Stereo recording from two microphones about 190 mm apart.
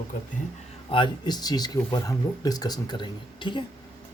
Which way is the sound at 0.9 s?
25° left (ahead or behind).